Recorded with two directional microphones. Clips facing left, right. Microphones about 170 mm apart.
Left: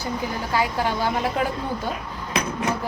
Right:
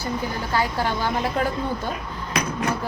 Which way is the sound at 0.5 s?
10° left (ahead or behind).